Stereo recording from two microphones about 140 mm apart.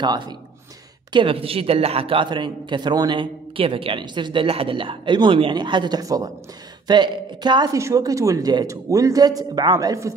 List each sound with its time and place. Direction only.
0.0 s a man's voice: 30° right (ahead or behind)